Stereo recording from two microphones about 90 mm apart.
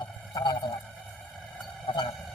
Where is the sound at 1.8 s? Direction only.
60° left (ahead or behind).